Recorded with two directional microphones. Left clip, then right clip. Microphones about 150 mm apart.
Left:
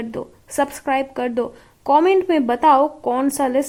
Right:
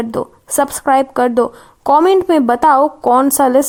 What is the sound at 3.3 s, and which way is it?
Speech, 30° right (ahead or behind).